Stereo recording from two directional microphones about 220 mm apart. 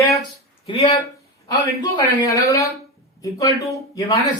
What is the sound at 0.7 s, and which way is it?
A man's voice, 25° left (ahead or behind).